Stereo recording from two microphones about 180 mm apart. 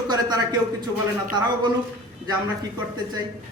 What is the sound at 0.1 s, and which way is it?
Speech, 20° right (ahead or behind).